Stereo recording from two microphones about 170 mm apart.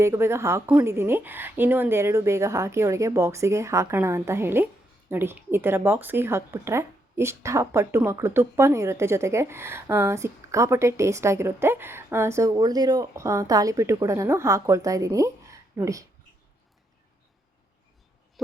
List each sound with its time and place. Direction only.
0.0 s a woman's voice: 15° right (ahead or behind)
18.4 s owl: centre (ahead or behind)